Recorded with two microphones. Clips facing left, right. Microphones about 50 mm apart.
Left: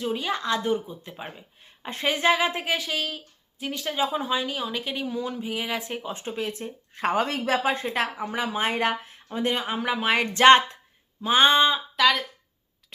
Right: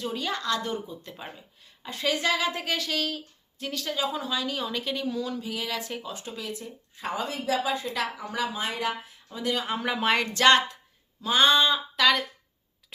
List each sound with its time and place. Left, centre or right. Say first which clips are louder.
0.0 s a woman's voice: left 3 dB; centre
4.5 s a woman's voice: left 1 dB; centre; by 6.7 s left
6.9 s a woman's voice: left 7 dB; left
9.6 s speech: left 1 dB; centre
10.2 s a woman's voice: left 6 dB; left
11.9 s speech: left 1 dB; centre